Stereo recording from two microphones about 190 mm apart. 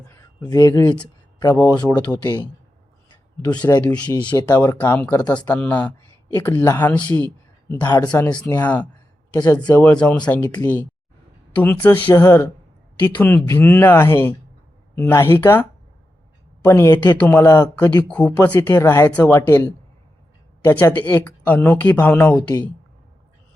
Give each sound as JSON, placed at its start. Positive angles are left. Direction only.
{"t": 0.1, "sound": "a sound", "side_deg": 15}
{"t": 1.5, "sound": "speech", "side_deg": 10}
{"t": 2.2, "sound": "speech", "side_deg": 25}
{"t": 3.4, "sound": "speech", "side_deg": 10}
{"t": 4.2, "sound": "speech", "side_deg": 25}
{"t": 4.5, "sound": "speech", "side_deg": 10}
{"t": 10.0, "sound": "speech", "side_deg": 5}
{"t": 10.4, "sound": "speech", "side_deg": 20}
{"t": 11.6, "sound": "speech", "side_deg": 10}
{"t": 16.6, "sound": "speech", "side_deg": 10}